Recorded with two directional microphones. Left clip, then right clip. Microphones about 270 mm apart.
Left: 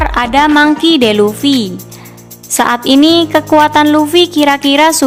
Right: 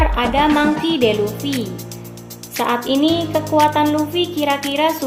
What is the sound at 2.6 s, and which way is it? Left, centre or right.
A woman's voice, left.